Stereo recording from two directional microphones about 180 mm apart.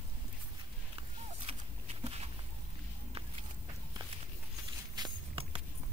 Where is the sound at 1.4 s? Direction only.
35° right (ahead or behind).